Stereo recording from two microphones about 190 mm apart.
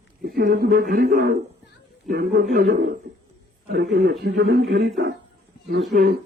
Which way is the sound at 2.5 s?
60° right (ahead or behind).